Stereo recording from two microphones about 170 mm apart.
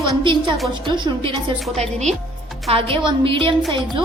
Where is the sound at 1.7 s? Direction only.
40° right (ahead or behind).